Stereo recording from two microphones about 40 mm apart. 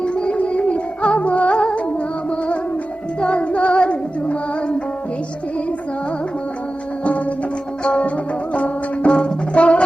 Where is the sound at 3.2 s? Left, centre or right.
Left.